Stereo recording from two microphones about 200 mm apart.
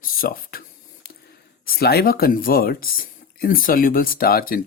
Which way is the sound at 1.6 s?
50° left (ahead or behind).